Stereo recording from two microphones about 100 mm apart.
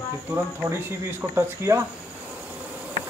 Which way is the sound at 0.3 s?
25° right (ahead or behind).